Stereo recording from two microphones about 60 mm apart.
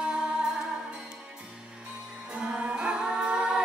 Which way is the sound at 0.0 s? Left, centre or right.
Centre.